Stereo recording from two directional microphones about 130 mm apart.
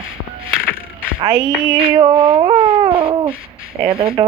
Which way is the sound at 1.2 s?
35° right (ahead or behind).